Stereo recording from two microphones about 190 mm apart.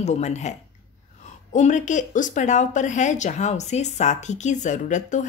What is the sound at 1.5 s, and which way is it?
Speech, 40° left (ahead or behind).